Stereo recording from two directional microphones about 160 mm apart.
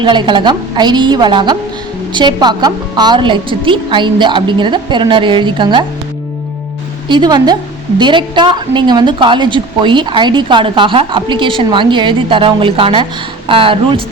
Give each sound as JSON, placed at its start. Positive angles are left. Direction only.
{"t": 0.0, "sound": "a woman's voice", "side_deg": -30}
{"t": 7.1, "sound": "a woman's voice", "side_deg": -25}